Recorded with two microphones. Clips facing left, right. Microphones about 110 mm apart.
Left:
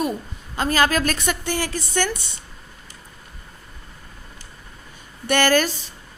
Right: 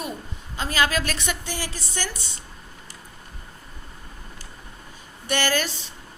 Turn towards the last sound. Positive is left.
turn(degrees=50)  # may be behind; listen again after turning